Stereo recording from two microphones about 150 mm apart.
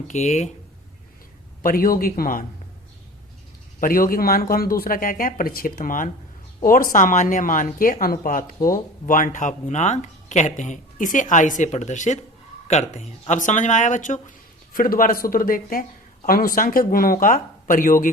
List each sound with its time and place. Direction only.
0.1 s speech: 50° left (ahead or behind)
1.6 s speech: 75° left (ahead or behind)
3.8 s speech: 65° left (ahead or behind)